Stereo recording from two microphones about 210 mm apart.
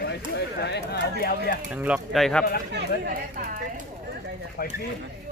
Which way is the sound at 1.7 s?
5° right (ahead or behind).